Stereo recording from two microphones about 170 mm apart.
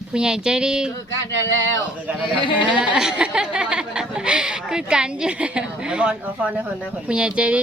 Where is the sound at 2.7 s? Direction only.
5° right (ahead or behind).